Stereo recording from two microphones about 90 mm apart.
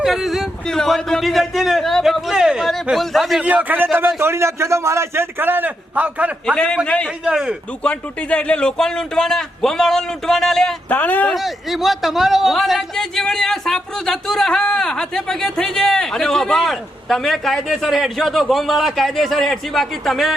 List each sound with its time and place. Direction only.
0.0 s a man's voice: 5° right (ahead or behind)
3.4 s a man's voice: 20° right (ahead or behind)
4.2 s a man's voice: 30° right (ahead or behind)
6.8 s speech: 15° left (ahead or behind)
7.3 s a man's voice: 10° right (ahead or behind)
7.9 s a man's voice: 15° left (ahead or behind)
10.8 s speech: 15° left (ahead or behind)
11.3 s a man's voice: centre (ahead or behind)